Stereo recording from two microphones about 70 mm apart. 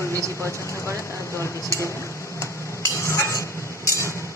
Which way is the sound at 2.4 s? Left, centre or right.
Left.